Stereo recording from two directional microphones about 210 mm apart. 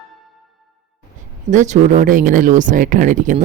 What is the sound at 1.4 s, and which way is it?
Speech, 35° right (ahead or behind).